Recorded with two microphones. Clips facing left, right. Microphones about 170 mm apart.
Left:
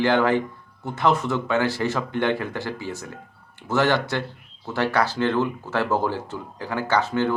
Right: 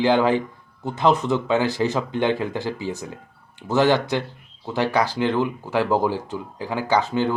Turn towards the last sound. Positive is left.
turn(degrees=-15)  # may be behind; listen again after turning